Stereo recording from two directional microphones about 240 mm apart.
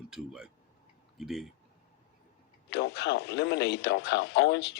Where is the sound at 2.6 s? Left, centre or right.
Left.